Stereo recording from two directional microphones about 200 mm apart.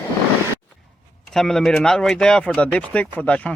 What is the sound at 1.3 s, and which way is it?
Speech, centre (ahead or behind).